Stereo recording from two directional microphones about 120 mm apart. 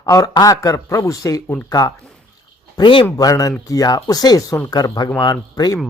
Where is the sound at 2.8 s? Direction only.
45° left (ahead or behind).